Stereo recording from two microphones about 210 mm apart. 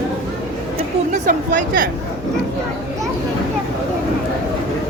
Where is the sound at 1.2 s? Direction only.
40° right (ahead or behind).